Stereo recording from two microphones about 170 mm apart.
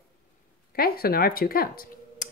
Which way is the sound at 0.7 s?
60° left (ahead or behind).